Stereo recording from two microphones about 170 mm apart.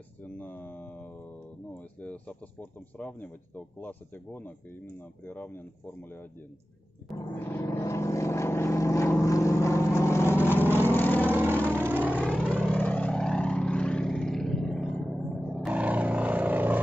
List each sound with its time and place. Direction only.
0.2 s a sound: 10° left (ahead or behind)
2.0 s speech: 10° left (ahead or behind)
7.3 s vehicle: 15° left (ahead or behind)
10.6 s vehicle: 10° right (ahead or behind)
10.9 s vehicle: 10° left (ahead or behind)
11.2 s vehicle: 10° right (ahead or behind)